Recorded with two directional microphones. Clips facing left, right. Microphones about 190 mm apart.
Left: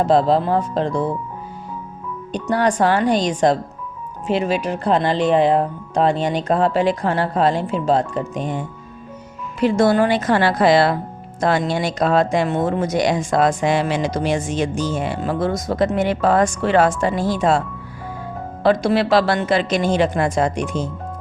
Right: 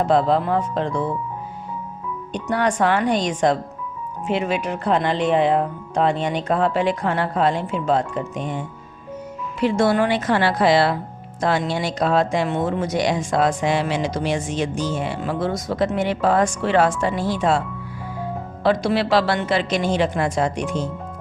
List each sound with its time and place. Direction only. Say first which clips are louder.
0.0 s speech: left 2 dB; 35° left (ahead or behind)
2.3 s speech: left 3 dB; 35° left (ahead or behind)
18.6 s speech: left 3 dB; 45° left (ahead or behind)